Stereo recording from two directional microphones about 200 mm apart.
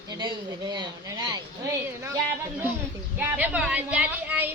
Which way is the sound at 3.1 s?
10° right (ahead or behind).